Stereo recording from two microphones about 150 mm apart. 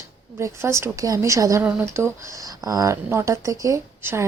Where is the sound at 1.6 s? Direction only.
10° right (ahead or behind).